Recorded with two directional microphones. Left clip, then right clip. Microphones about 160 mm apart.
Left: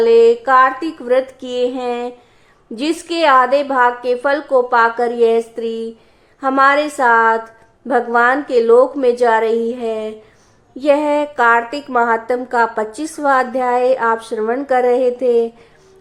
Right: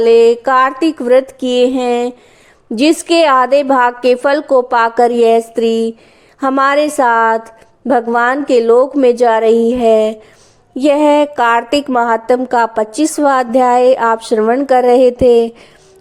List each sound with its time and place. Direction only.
0.0 s a woman's voice: 45° right (ahead or behind)